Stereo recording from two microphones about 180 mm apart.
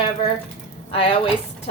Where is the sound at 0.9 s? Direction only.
30° left (ahead or behind).